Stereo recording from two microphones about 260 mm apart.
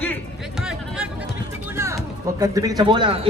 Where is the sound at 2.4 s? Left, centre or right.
Centre.